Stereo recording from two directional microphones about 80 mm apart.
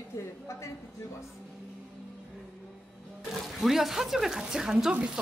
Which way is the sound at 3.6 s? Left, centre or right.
Centre.